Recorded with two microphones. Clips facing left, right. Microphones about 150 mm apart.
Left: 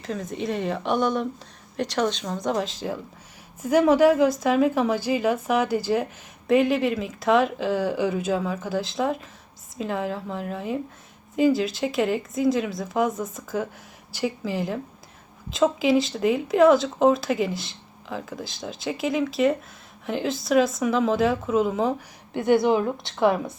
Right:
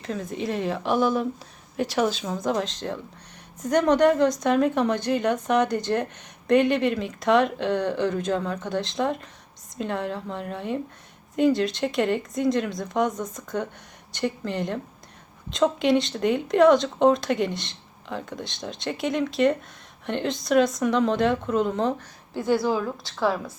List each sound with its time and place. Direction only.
0.0 s speech: centre (ahead or behind)
22.4 s a woman's voice: 20° left (ahead or behind)